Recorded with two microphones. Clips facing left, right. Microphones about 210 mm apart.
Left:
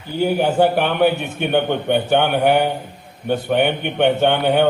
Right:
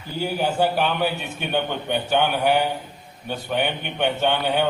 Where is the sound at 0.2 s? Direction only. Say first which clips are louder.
Left 6 dB; 60° left (ahead or behind).